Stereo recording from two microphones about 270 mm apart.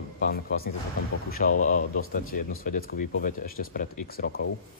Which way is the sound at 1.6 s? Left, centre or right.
Left.